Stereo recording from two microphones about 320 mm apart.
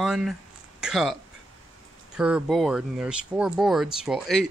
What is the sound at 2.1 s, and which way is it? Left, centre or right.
Speech, centre.